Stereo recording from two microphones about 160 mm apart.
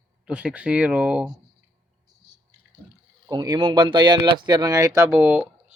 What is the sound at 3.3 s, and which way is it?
Speech, 25° right (ahead or behind).